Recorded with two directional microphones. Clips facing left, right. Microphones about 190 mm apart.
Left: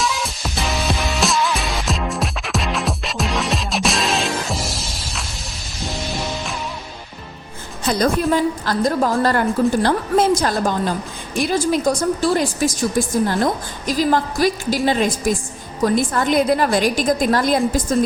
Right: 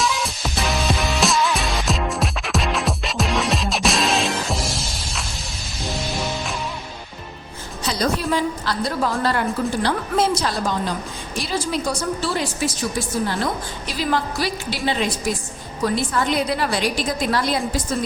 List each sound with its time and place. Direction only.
0.0 s music: centre (ahead or behind)
7.9 s a woman's voice: 50° left (ahead or behind)